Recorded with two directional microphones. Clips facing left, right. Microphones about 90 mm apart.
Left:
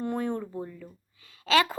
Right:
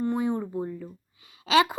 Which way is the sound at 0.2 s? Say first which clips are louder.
Right 3 dB; 15° right (ahead or behind).